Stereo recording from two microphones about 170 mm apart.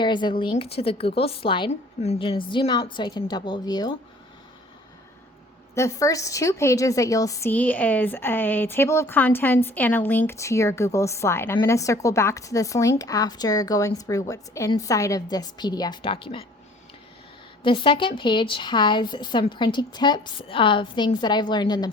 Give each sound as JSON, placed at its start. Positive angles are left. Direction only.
{"t": 0.0, "sound": "a woman's voice", "side_deg": 25}
{"t": 5.7, "sound": "a woman's voice", "side_deg": 15}
{"t": 17.6, "sound": "a woman's voice", "side_deg": 30}